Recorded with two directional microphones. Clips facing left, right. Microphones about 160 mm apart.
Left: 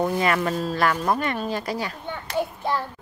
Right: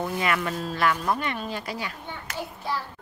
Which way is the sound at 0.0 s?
40° left (ahead or behind).